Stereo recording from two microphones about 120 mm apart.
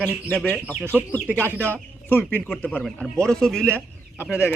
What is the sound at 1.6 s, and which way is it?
Speech, 15° left (ahead or behind).